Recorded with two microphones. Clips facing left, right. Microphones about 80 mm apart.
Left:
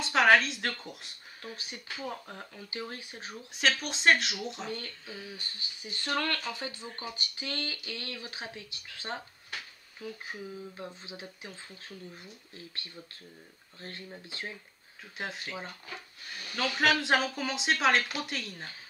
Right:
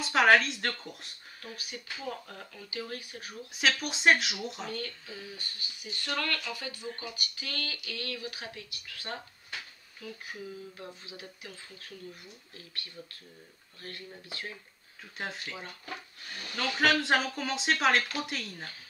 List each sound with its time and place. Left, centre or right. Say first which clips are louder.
0.0 s speech: even; centre
1.4 s speech: even; left
3.5 s speech: even; centre
4.6 s speech: right 1 dB; left
5.0 s speech: left 1 dB; centre
5.3 s speech: even; left
15.1 s speech: even; centre
16.5 s speech: even; centre